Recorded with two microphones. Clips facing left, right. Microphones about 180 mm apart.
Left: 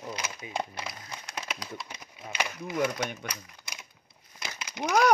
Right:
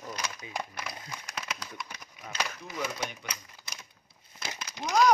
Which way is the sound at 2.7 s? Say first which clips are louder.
Left 6 dB; 55° left (ahead or behind).